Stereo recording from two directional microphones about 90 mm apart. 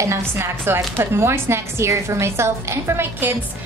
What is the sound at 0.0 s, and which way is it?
Speech, 35° right (ahead or behind).